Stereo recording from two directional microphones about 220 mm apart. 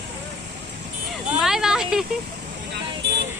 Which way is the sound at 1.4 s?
Centre (ahead or behind).